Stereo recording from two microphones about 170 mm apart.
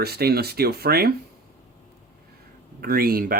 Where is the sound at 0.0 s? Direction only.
70° right (ahead or behind).